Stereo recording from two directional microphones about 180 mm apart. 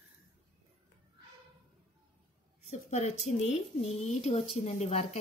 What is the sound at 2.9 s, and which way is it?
A woman's voice, 35° left (ahead or behind).